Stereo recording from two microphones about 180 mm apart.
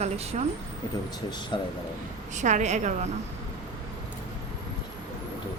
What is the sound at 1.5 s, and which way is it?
Speech, 25° left (ahead or behind).